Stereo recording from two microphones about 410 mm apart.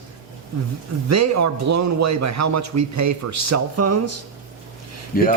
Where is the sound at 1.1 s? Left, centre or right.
Right.